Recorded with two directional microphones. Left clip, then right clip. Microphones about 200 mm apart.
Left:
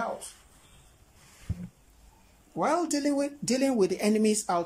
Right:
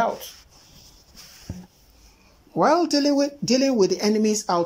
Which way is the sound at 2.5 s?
10° right (ahead or behind).